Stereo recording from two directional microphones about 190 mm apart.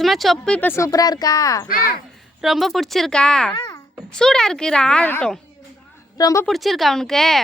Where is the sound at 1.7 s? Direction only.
50° left (ahead or behind).